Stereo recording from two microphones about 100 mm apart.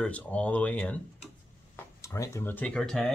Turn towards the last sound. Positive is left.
turn(degrees=10)  # may be behind; listen again after turning